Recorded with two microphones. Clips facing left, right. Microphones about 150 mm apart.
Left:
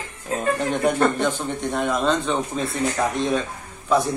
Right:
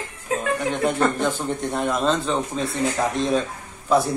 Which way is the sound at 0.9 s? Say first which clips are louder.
Left 1 dB; 5° right (ahead or behind).